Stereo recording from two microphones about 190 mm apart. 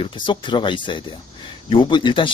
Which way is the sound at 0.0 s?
25° left (ahead or behind).